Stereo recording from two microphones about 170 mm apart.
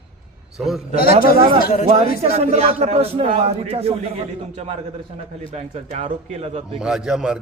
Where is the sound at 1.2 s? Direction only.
60° left (ahead or behind).